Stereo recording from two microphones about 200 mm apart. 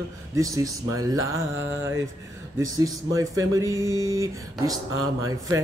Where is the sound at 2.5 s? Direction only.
15° right (ahead or behind).